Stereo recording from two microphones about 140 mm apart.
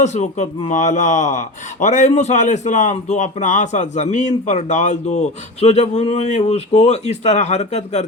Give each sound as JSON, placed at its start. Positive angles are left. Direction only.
{"t": 0.0, "sound": "a man's voice", "side_deg": 55}